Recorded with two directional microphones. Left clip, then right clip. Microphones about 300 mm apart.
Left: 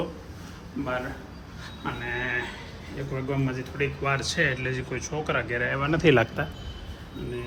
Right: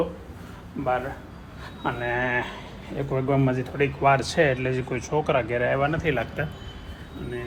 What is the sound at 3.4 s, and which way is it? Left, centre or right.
Speech, centre.